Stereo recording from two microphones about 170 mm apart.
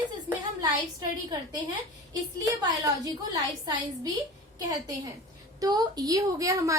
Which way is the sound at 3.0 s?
20° right (ahead or behind).